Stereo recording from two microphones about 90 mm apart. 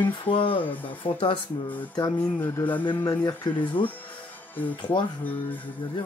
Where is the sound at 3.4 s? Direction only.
60° left (ahead or behind).